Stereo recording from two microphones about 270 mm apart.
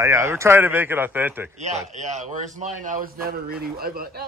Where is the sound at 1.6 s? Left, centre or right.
Right.